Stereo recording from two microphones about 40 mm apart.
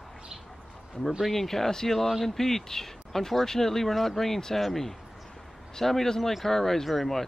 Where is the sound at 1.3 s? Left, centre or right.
Centre.